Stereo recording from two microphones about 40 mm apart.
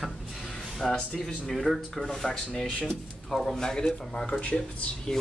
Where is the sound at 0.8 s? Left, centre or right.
Centre.